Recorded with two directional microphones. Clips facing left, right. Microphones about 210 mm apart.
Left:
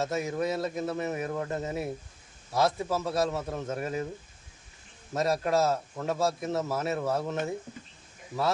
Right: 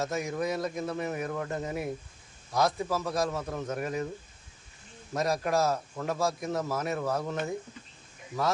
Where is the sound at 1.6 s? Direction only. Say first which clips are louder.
Left 1 dB; 30° left (ahead or behind).